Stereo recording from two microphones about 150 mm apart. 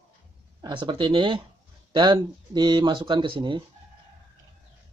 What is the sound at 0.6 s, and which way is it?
Speech, 35° right (ahead or behind).